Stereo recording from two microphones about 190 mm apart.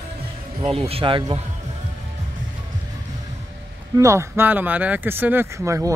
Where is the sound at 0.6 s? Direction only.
30° right (ahead or behind).